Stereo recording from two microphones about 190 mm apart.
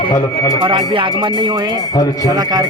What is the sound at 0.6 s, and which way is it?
Speech, 25° right (ahead or behind).